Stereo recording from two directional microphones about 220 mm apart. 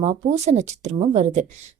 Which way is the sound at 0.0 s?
30° right (ahead or behind).